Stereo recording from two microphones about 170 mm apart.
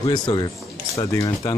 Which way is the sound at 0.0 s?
25° left (ahead or behind).